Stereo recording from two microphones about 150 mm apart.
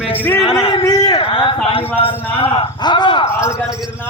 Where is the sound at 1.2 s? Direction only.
35° left (ahead or behind).